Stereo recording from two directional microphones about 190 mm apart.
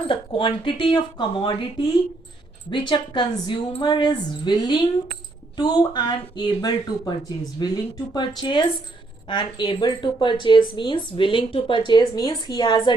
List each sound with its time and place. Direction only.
0.1 s a woman's voice: 30° left (ahead or behind)